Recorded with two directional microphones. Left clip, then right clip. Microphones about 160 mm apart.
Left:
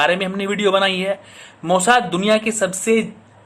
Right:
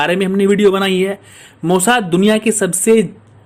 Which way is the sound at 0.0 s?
45° right (ahead or behind).